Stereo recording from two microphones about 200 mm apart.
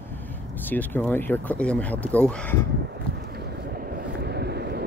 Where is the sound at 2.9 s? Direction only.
55° right (ahead or behind).